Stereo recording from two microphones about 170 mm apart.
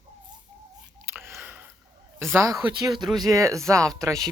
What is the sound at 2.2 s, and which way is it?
Speech, 15° right (ahead or behind).